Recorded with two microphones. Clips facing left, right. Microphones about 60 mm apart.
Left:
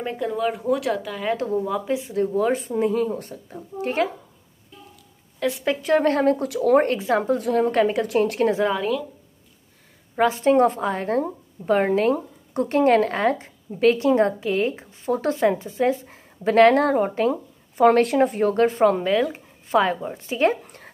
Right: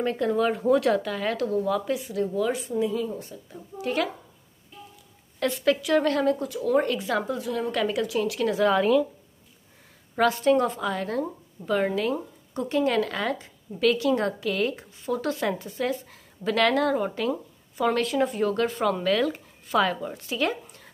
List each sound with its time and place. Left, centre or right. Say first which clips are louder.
0.0 s speech: right 1 dB; centre
1.3 s speech: left 3 dB; left
3.7 s a woman's voice: left 4 dB; left
5.4 s a woman's voice: left 2 dB; centre
5.8 s a woman's voice: left 4 dB; left
6.4 s speech: left 6 dB; left
7.0 s a woman's voice: left 6 dB; left
7.3 s a woman's voice: left 8 dB; left
8.7 s speech: right 4 dB; centre
10.1 s a woman's voice: left 3 dB; left
19.0 s speech: left 2 dB; left
20.6 s a sound: left 5 dB; left